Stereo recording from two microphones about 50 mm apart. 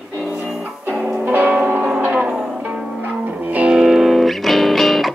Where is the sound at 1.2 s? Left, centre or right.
Right.